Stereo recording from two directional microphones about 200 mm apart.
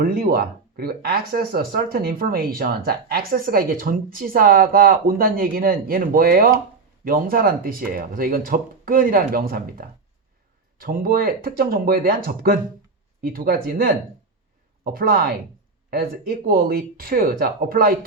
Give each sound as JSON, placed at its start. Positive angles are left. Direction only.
{"t": 0.0, "sound": "speech", "side_deg": -45}